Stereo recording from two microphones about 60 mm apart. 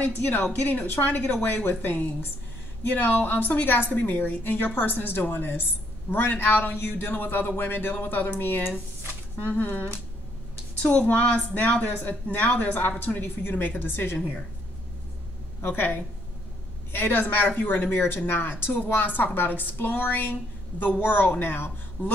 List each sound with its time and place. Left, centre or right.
0.2 s a woman's voice: left
15.6 s a woman's voice: left